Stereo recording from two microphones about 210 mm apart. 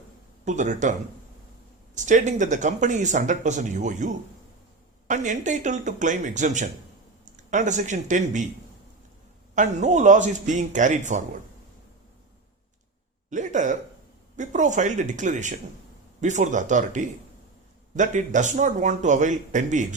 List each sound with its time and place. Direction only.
0.4 s speech: 35° right (ahead or behind)
2.0 s speech: 35° right (ahead or behind)
9.6 s speech: 35° right (ahead or behind)
13.3 s speech: 35° right (ahead or behind)